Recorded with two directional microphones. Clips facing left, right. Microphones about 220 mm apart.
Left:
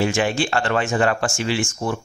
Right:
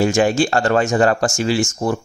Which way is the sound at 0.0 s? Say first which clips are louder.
Right 5 dB; 45° right (ahead or behind).